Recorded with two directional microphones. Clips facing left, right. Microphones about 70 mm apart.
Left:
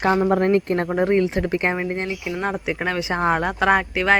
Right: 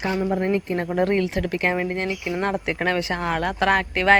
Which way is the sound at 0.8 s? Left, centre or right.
Centre.